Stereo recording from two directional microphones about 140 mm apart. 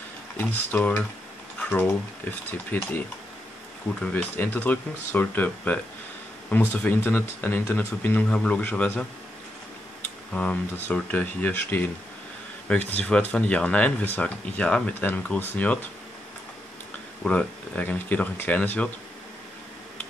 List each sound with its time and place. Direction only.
0.4 s speech: 10° left (ahead or behind)
1.6 s a sound: 10° left (ahead or behind)
2.5 s speech: 15° left (ahead or behind)
4.0 s speech: 10° left (ahead or behind)
10.3 s speech: 10° left (ahead or behind)
17.2 s speech: 10° left (ahead or behind)